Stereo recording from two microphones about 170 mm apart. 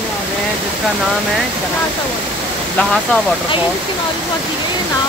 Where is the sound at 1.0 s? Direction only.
Centre (ahead or behind).